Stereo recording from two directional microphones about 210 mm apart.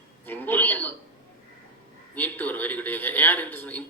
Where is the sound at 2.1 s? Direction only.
10° left (ahead or behind).